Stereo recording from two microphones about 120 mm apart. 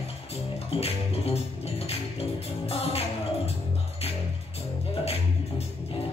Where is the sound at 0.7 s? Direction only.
55° left (ahead or behind).